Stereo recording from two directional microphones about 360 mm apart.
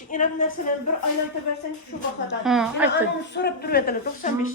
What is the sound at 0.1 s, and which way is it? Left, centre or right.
Speech, left.